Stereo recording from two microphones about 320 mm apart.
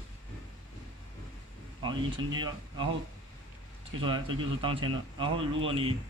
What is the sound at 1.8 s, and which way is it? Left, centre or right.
Speech, centre.